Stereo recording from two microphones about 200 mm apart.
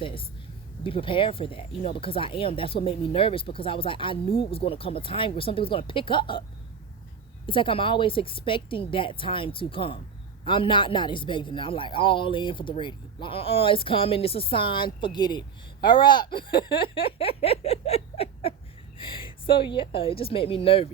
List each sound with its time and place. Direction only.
0.0 s a man's voice: 25° left (ahead or behind)
7.4 s a man's voice: 25° left (ahead or behind)
16.6 s a sound: 25° left (ahead or behind)
18.9 s a man's voice: 25° left (ahead or behind)